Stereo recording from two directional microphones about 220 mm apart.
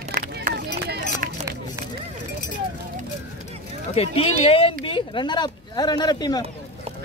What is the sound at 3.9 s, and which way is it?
Speech, 25° left (ahead or behind).